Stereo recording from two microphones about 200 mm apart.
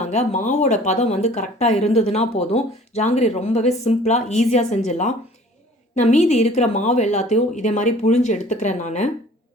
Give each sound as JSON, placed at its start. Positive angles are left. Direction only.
{"t": 0.0, "sound": "speech", "side_deg": 35}